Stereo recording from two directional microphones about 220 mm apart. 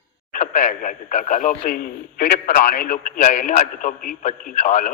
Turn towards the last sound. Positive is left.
turn(degrees=35)  # may be behind; listen again after turning